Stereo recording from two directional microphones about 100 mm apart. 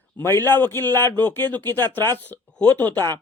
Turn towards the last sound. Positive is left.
turn(degrees=20)  # may be behind; listen again after turning